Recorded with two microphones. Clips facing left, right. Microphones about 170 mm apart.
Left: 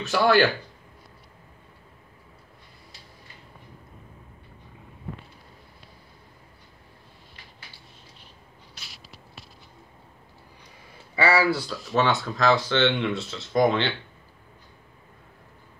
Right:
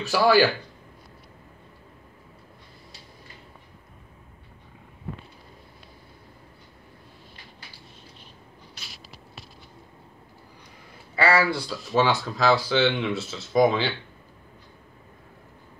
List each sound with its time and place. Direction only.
0.0 s speech: 5° right (ahead or behind)
11.1 s speech: 15° left (ahead or behind)
11.5 s speech: centre (ahead or behind)